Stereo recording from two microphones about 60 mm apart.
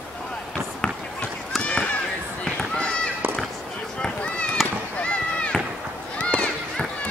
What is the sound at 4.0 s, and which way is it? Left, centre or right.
Run, centre.